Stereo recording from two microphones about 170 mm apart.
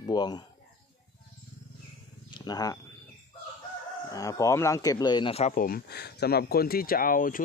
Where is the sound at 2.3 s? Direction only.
25° left (ahead or behind).